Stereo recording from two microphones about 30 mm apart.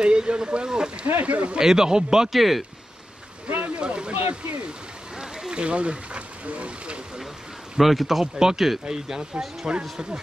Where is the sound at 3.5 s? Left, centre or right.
Right.